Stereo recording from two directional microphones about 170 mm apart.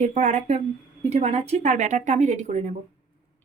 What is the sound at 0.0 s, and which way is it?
Speech, 45° right (ahead or behind).